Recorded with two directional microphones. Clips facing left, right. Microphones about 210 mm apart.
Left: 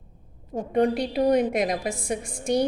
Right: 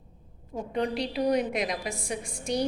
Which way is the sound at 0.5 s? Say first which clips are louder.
Left 7 dB; 50° left (ahead or behind).